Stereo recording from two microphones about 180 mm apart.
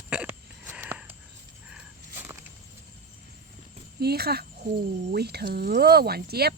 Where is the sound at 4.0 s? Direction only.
60° right (ahead or behind).